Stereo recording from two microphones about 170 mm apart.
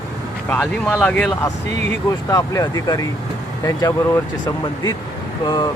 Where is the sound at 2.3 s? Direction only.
20° left (ahead or behind).